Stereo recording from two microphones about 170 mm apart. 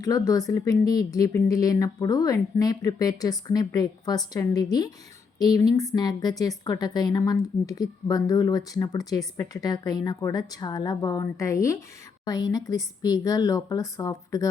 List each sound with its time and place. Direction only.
0.0 s a woman's voice: 20° left (ahead or behind)